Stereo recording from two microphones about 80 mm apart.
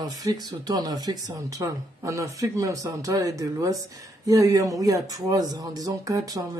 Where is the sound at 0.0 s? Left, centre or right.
Right.